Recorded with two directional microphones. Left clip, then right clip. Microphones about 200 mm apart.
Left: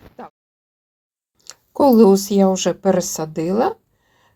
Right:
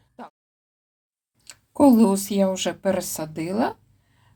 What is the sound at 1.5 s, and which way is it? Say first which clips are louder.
Speech: left 3 dB; 30° left (ahead or behind).